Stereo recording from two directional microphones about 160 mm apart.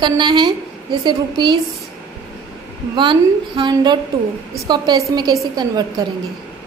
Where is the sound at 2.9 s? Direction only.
30° right (ahead or behind).